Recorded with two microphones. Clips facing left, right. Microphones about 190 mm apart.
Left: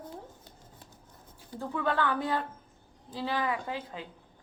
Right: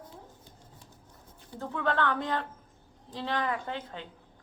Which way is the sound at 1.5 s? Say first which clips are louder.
Even; 5° left (ahead or behind).